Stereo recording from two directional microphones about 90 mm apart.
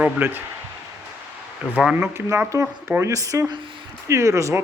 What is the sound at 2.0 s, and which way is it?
Speech, 25° right (ahead or behind).